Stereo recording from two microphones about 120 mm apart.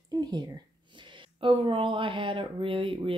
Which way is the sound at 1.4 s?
45° right (ahead or behind).